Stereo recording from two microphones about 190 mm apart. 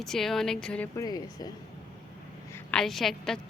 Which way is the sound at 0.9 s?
20° left (ahead or behind).